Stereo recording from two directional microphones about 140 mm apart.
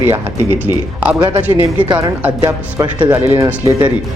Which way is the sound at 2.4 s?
25° right (ahead or behind).